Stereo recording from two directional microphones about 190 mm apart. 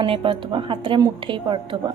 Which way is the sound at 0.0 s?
25° right (ahead or behind).